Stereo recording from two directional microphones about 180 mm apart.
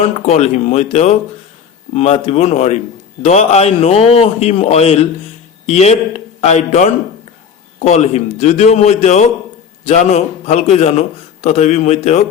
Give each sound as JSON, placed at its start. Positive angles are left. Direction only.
{"t": 0.0, "sound": "a man's voice", "side_deg": 40}